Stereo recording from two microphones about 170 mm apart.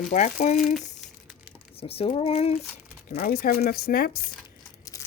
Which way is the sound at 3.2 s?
60° left (ahead or behind).